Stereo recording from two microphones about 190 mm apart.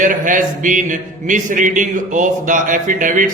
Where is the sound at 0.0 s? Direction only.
45° right (ahead or behind).